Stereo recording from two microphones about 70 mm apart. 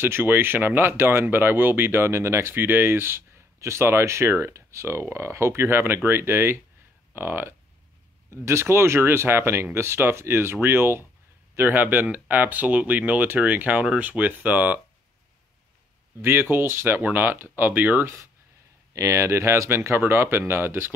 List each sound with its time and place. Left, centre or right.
0.0 s speech: right
16.2 s speech: right